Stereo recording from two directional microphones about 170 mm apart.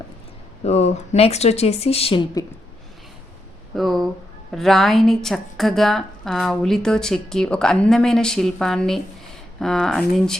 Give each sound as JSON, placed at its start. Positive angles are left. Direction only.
{"t": 0.6, "sound": "speech", "side_deg": 40}
{"t": 3.8, "sound": "a woman's voice", "side_deg": 0}